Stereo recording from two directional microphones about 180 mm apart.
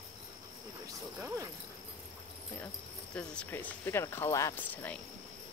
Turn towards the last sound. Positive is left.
turn(degrees=15)  # may be behind; listen again after turning